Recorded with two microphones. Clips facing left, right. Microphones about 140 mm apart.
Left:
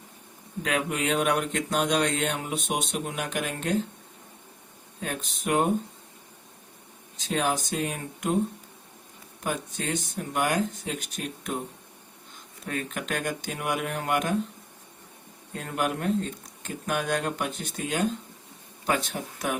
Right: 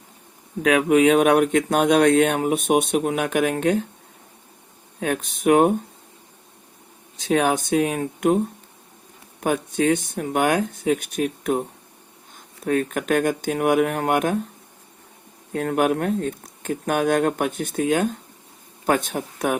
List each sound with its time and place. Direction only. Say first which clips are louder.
0.6 s speech: right 12 dB; 65° right (ahead or behind)
4.9 s speech: right 9 dB; 60° right (ahead or behind)
7.2 s speech: right 7 dB; 60° right (ahead or behind)
9.4 s speech: right 10 dB; 60° right (ahead or behind)
12.6 s speech: right 10 dB; 50° right (ahead or behind)
15.5 s speech: right 9 dB; 55° right (ahead or behind)